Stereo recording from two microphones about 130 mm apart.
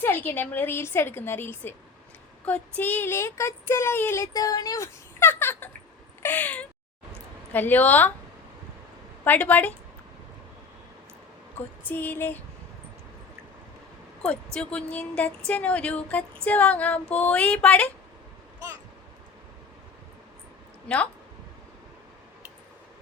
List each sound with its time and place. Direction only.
0.0 s a woman's voice: 15° left (ahead or behind)
6.2 s cat: 15° left (ahead or behind)
7.5 s a woman's voice: 15° left (ahead or behind)
9.2 s a woman's voice: 15° left (ahead or behind)
11.9 s a woman's voice: 15° left (ahead or behind)
14.2 s a woman's voice: 10° left (ahead or behind)
20.8 s a woman's voice: 10° left (ahead or behind)